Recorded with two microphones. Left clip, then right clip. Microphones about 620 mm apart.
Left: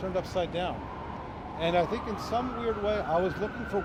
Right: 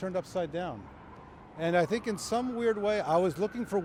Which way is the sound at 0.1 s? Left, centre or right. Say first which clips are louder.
Left 4 dB; right.